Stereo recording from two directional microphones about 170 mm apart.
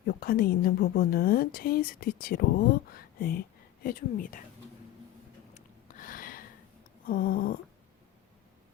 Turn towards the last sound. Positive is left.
turn(degrees=60)  # may be behind; listen again after turning